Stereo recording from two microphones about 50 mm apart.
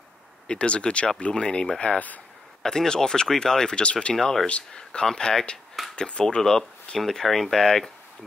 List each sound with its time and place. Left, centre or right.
0.5 s speech: centre
2.6 s speech: centre
4.1 s speech: centre
4.5 s speech: centre